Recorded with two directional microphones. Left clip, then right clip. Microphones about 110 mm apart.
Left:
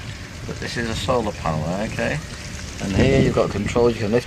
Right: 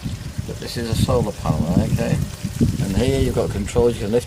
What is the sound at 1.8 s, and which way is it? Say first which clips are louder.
Speech: right 1 dB; 10° right (ahead or behind).